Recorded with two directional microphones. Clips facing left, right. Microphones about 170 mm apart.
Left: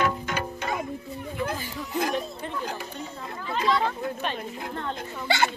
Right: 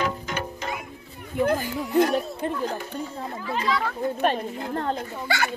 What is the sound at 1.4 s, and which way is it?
Speech, 50° right (ahead or behind).